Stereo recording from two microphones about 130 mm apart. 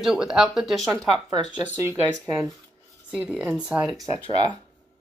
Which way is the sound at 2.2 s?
Centre (ahead or behind).